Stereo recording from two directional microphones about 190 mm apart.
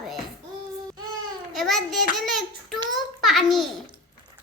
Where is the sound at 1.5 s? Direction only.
Centre (ahead or behind).